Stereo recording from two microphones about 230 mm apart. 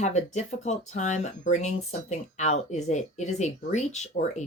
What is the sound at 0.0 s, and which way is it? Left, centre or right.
Speech, left.